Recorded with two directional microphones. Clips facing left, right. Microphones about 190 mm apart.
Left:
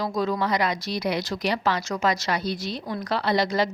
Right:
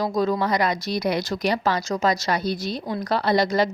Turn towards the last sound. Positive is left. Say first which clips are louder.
# right 3 dB
turn(degrees=-45)  # may be behind; listen again after turning